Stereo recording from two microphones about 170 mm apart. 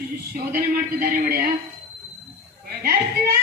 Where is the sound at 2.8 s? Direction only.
65° right (ahead or behind).